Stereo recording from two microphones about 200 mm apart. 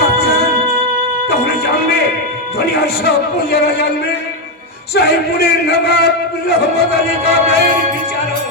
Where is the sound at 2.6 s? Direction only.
50° left (ahead or behind).